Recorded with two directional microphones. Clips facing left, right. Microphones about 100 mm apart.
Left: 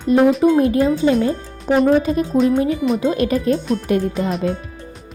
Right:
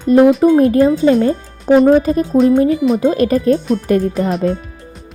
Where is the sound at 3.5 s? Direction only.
Centre (ahead or behind).